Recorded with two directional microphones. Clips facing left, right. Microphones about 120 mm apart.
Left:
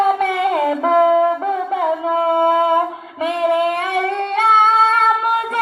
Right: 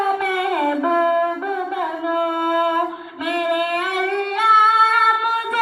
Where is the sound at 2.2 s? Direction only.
25° left (ahead or behind).